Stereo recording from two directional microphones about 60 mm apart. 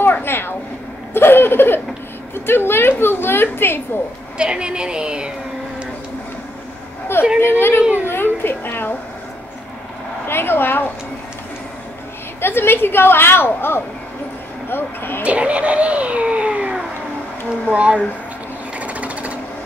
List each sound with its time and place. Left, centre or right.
0.0 s a sound: left
2.3 s a woman's voice: left
4.4 s a woman's voice: centre
7.3 s a woman's voice: left
10.2 s a woman's voice: left
12.4 s a woman's voice: left
15.2 s speech: right
18.8 s sewing machine: right